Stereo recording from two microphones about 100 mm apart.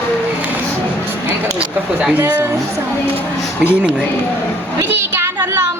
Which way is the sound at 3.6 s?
15° right (ahead or behind).